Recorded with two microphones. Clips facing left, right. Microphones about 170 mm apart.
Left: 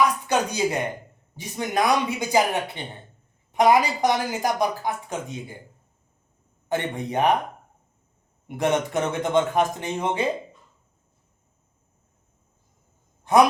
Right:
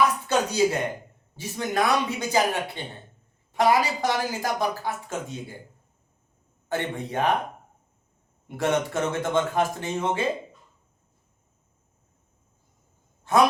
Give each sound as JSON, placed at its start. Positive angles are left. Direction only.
{"t": 0.3, "sound": "a man's voice", "side_deg": 15}
{"t": 6.7, "sound": "a man's voice", "side_deg": 15}
{"t": 8.4, "sound": "a man's voice", "side_deg": 20}
{"t": 13.3, "sound": "speech", "side_deg": 15}